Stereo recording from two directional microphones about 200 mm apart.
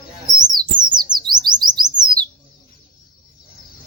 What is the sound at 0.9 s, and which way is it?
Bird, 20° right (ahead or behind).